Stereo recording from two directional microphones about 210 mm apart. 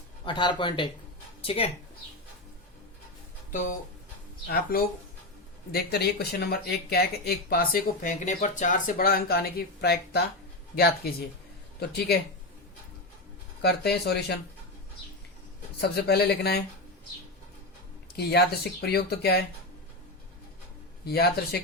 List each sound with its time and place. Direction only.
0.3 s speech: 20° left (ahead or behind)
3.5 s speech: 35° left (ahead or behind)
13.6 s speech: 50° left (ahead or behind)
15.8 s speech: 50° left (ahead or behind)
18.2 s speech: 50° left (ahead or behind)
21.0 s speech: 50° left (ahead or behind)